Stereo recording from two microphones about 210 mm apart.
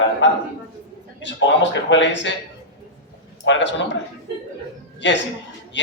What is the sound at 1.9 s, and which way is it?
Speech, 55° left (ahead or behind).